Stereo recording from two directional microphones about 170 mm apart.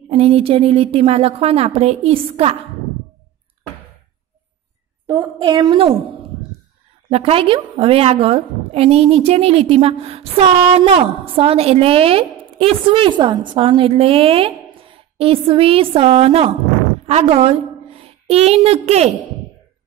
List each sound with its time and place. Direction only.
0.1 s a woman's voice: 35° right (ahead or behind)
5.0 s a woman's voice: 25° right (ahead or behind)
7.1 s a woman's voice: 35° right (ahead or behind)